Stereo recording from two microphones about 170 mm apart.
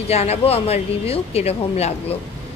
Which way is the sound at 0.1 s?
40° left (ahead or behind).